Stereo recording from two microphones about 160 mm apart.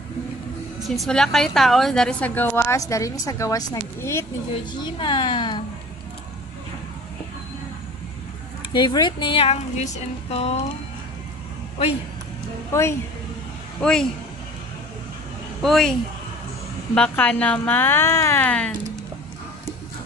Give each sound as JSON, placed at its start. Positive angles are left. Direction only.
{"t": 0.8, "sound": "a woman's voice", "side_deg": 0}
{"t": 4.8, "sound": "a woman's voice", "side_deg": 30}
{"t": 8.7, "sound": "speech", "side_deg": 25}
{"t": 13.8, "sound": "speech", "side_deg": 5}
{"t": 15.6, "sound": "a woman's voice", "side_deg": 0}